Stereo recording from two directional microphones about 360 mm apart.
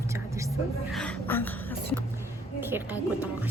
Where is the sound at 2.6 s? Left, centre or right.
Centre.